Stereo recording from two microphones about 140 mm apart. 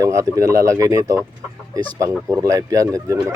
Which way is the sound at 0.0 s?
25° right (ahead or behind).